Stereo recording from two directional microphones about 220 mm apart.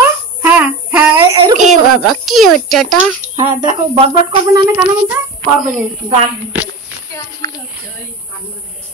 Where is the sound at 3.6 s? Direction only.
25° right (ahead or behind).